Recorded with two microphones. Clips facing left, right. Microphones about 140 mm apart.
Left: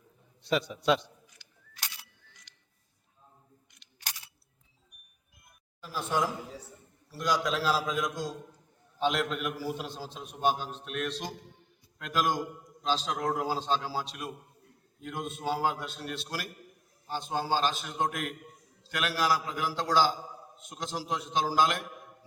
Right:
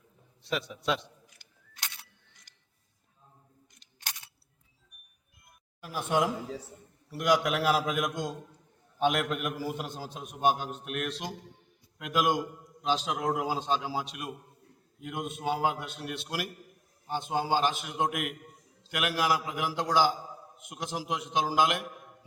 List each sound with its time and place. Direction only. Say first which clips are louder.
0.4 s a man's voice: left 4 dB; centre (ahead or behind)
5.9 s a man's voice: right 2 dB; 15° right (ahead or behind)
7.1 s a man's voice: right 3 dB; 60° right (ahead or behind)
9.3 s a man's voice: right 1 dB; centre (ahead or behind)
9.7 s a sound: right 1 dB; 45° right (ahead or behind)
11.9 s a man's voice: right 2 dB; 10° right (ahead or behind)